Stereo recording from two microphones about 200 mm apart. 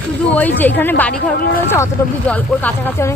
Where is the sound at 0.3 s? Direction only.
10° left (ahead or behind).